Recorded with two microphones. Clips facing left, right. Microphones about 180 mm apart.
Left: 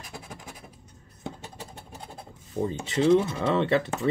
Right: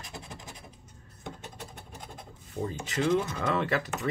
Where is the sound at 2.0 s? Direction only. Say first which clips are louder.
Left 2 dB; 30° left (ahead or behind).